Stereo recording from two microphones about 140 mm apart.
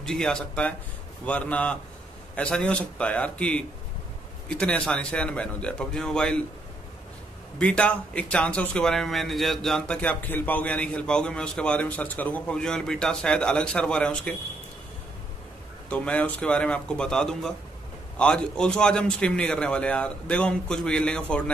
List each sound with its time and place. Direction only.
0.0 s a man's voice: 5° left (ahead or behind)
7.5 s a man's voice: 5° left (ahead or behind)
15.9 s a man's voice: 10° left (ahead or behind)